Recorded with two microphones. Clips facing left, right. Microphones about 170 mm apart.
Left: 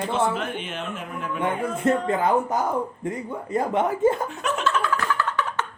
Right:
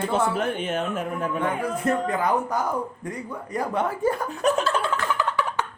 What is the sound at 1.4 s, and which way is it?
Speech, 25° left (ahead or behind).